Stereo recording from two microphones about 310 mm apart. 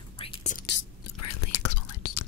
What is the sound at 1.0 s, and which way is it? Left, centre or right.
Whispering, left.